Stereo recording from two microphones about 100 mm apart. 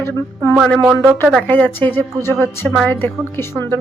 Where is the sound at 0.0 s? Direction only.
20° left (ahead or behind).